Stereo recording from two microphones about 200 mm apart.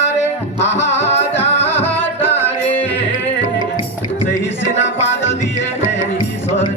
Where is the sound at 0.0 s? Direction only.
35° left (ahead or behind).